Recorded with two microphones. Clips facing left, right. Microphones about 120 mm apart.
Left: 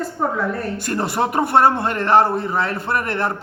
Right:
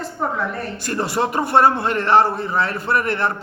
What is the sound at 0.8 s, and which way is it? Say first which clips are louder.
Speech: even; 50° left (ahead or behind).